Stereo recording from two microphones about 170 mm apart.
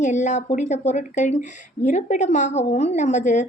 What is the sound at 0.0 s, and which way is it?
A woman's voice, 45° left (ahead or behind).